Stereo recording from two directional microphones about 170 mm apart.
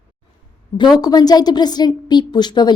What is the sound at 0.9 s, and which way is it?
A woman's voice, 25° left (ahead or behind).